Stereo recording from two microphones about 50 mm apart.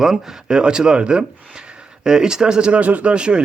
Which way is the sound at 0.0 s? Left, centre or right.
Centre.